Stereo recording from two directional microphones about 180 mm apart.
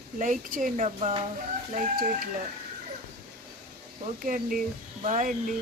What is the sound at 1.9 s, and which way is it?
Speech, 55° right (ahead or behind).